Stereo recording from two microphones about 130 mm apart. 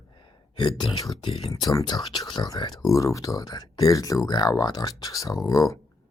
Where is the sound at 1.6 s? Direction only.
30° left (ahead or behind).